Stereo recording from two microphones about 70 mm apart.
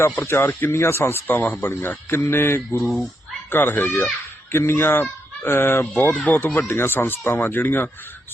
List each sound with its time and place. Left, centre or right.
0.0 s speech: left